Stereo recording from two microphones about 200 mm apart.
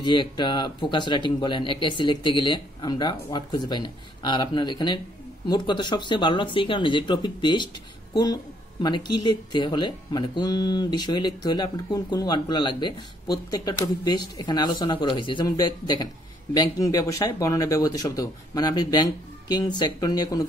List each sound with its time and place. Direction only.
0.0 s speech: 25° left (ahead or behind)